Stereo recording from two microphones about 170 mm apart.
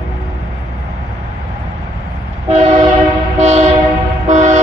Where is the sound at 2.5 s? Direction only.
40° right (ahead or behind).